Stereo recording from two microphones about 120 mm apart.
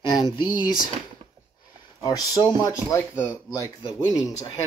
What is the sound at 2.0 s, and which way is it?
Speech, 30° left (ahead or behind).